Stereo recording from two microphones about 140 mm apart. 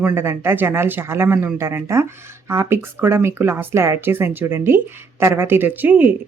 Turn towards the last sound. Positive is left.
turn(degrees=-15)  # may be behind; listen again after turning